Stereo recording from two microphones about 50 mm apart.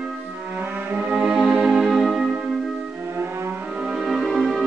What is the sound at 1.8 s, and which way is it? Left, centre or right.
Music, centre.